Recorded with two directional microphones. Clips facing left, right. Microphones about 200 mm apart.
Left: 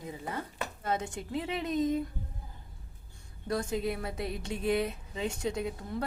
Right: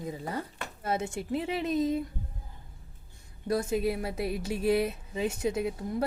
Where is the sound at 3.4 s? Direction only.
25° right (ahead or behind).